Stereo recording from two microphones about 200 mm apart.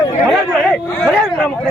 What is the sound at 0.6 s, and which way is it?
Speech, centre (ahead or behind).